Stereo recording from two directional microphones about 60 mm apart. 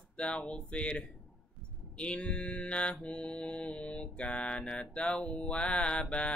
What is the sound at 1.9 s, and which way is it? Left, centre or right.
Mantra, centre.